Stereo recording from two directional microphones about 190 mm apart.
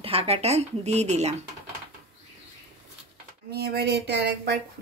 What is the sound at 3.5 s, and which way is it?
Speech, 55° right (ahead or behind).